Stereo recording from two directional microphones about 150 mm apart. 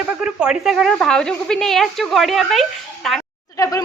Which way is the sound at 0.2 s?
5° right (ahead or behind).